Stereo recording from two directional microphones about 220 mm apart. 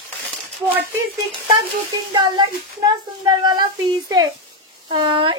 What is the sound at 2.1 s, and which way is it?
A woman's voice, 20° right (ahead or behind).